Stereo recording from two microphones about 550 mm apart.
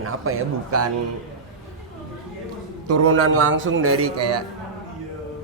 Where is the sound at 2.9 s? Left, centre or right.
Right.